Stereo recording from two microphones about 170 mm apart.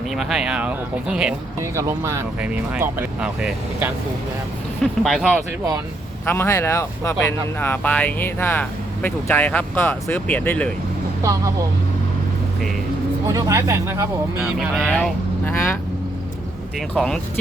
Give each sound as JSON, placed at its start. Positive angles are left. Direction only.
{"t": 0.1, "sound": "speech", "side_deg": 0}
{"t": 1.5, "sound": "speech", "side_deg": -15}
{"t": 6.2, "sound": "speech", "side_deg": 15}
{"t": 11.2, "sound": "speech", "side_deg": -20}
{"t": 13.2, "sound": "speech", "side_deg": -15}
{"t": 14.8, "sound": "speech", "side_deg": 5}
{"t": 16.9, "sound": "speech", "side_deg": 5}